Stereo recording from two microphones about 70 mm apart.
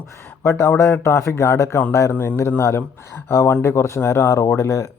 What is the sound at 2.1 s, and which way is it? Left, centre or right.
Speech, left.